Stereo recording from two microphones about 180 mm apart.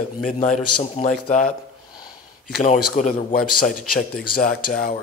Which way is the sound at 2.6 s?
40° left (ahead or behind).